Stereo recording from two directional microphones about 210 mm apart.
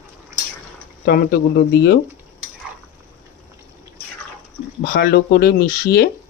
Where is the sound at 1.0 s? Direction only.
45° left (ahead or behind).